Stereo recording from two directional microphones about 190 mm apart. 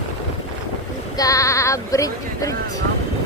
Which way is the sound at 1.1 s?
20° left (ahead or behind).